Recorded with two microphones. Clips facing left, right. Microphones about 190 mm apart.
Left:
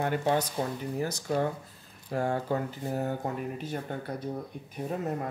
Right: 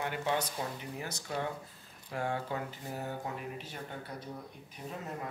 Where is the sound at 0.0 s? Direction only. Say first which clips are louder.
Left 6 dB; 45° left (ahead or behind).